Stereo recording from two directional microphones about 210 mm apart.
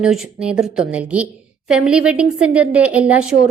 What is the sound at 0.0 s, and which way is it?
A woman's voice, 5° right (ahead or behind).